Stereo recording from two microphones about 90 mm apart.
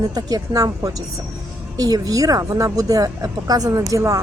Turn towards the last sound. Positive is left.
turn(degrees=-40)  # may be behind; listen again after turning